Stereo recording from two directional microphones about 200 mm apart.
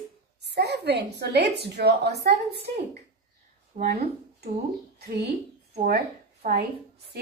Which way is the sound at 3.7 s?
45° right (ahead or behind).